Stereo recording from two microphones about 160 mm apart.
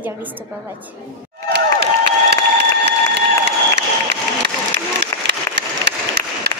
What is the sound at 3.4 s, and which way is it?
Crowd, 90° right.